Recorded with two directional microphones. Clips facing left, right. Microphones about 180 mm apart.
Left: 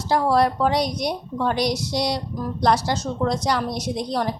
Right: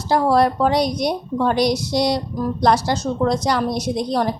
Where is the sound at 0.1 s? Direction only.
45° right (ahead or behind).